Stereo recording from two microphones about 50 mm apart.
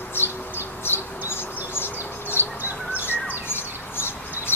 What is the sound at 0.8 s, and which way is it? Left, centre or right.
Bird, left.